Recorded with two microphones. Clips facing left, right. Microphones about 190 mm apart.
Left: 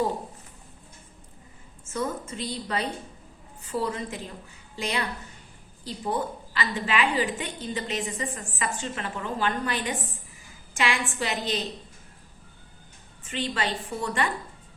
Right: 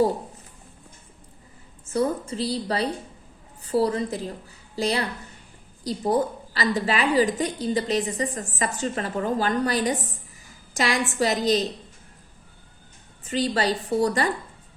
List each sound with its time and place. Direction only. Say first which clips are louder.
1.8 s a woman's voice: right 6 dB; 35° right (ahead or behind)
13.2 s a woman's voice: right 6 dB; 40° right (ahead or behind)